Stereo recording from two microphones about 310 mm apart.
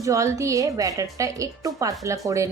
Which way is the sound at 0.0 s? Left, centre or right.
Centre.